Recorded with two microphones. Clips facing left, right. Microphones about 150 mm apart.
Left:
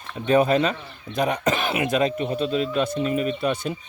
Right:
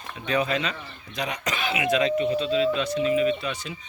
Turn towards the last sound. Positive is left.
turn(degrees=50)  # may be behind; listen again after turning